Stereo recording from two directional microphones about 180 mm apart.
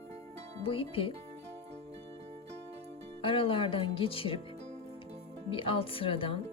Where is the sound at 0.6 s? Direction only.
30° left (ahead or behind).